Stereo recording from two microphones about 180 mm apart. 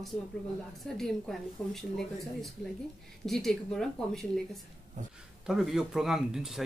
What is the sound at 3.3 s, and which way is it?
Speech, centre (ahead or behind).